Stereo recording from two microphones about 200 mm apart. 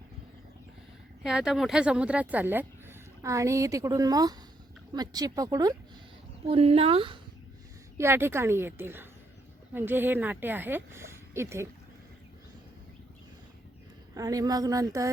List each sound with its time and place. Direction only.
1.2 s a woman's voice: 5° right (ahead or behind)
6.5 s speech: 30° right (ahead or behind)
7.9 s speech: 10° right (ahead or behind)
14.1 s speech: 15° right (ahead or behind)